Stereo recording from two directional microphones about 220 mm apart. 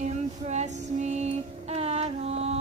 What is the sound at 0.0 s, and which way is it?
Music, 30° right (ahead or behind).